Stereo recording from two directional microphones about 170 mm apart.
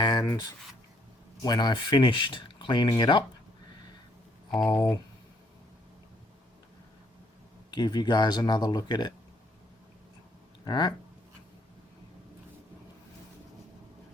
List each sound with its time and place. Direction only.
0.0 s a sound: 25° left (ahead or behind)
1.4 s speech: 25° left (ahead or behind)
4.6 s speech: 10° left (ahead or behind)
7.7 s speech: 25° left (ahead or behind)
10.7 s speech: 25° left (ahead or behind)